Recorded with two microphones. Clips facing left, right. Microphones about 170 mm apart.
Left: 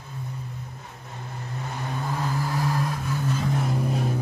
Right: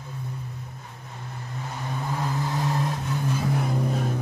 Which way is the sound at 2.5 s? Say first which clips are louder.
Even; 25° right (ahead or behind).